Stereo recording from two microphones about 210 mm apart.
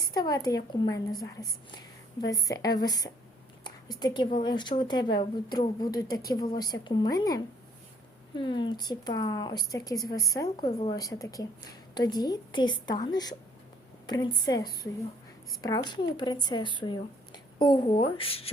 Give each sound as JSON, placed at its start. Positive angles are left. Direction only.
{"t": 0.0, "sound": "a woman's voice", "side_deg": 20}